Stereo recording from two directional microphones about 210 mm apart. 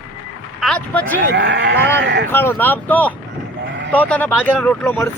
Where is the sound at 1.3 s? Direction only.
55° right (ahead or behind).